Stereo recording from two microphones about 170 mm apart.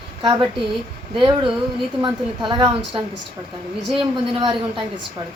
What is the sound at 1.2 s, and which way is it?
A woman's voice, 30° right (ahead or behind).